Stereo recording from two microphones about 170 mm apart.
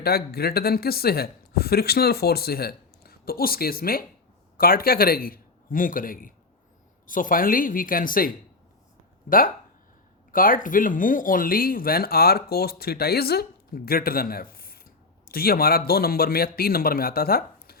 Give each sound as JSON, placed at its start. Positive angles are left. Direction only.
{"t": 0.0, "sound": "a man's voice", "side_deg": 65}